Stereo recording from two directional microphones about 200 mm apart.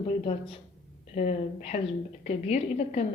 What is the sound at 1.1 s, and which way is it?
A woman's voice, 40° left (ahead or behind).